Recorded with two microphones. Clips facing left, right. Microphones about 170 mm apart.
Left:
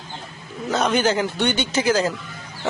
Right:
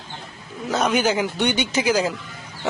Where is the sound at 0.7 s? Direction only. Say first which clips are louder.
Even; 10° right (ahead or behind).